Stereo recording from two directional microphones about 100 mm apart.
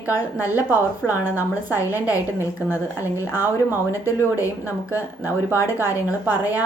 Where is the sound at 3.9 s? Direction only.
35° left (ahead or behind).